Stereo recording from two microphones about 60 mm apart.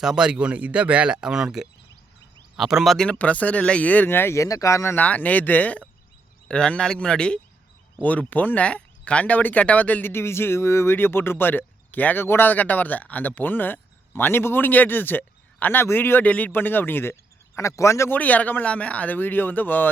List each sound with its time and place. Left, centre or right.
0.0 s speech: centre
3.2 s speech: left
4.4 s speech: left
4.9 s speech: left
6.5 s speech: centre
8.0 s speech: left
10.1 s speech: left
10.9 s speech: left
18.1 s speech: left